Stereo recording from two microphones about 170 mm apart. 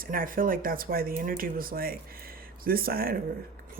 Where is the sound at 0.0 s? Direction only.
55° right (ahead or behind).